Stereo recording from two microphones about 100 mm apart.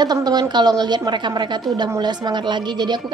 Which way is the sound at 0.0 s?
45° right (ahead or behind).